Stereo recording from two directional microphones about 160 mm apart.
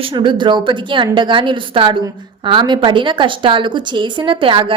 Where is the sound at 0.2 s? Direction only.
30° right (ahead or behind).